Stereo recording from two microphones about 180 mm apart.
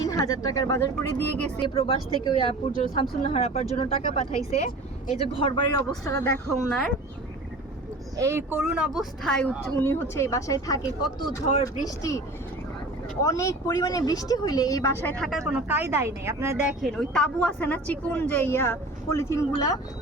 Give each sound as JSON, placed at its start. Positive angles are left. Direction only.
{"t": 0.0, "sound": "speech", "side_deg": 20}
{"t": 1.6, "sound": "speech", "side_deg": 30}
{"t": 6.1, "sound": "speech", "side_deg": 15}
{"t": 6.5, "sound": "speech", "side_deg": 0}
{"t": 8.1, "sound": "speech", "side_deg": -15}
{"t": 9.8, "sound": "speech", "side_deg": 15}
{"t": 13.2, "sound": "speech", "side_deg": 20}
{"t": 16.9, "sound": "speech", "side_deg": 5}